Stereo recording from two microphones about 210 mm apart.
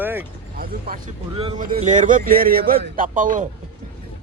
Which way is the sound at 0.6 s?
45° right (ahead or behind).